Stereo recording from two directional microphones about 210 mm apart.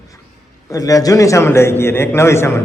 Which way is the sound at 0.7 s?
15° left (ahead or behind).